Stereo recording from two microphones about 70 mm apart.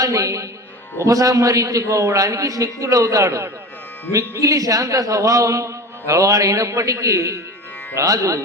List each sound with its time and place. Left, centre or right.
0.0 s a man's voice: right